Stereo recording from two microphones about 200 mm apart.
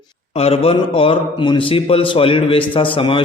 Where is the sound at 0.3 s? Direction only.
30° left (ahead or behind).